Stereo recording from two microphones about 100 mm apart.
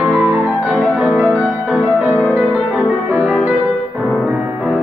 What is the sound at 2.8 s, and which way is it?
Music, 10° right (ahead or behind).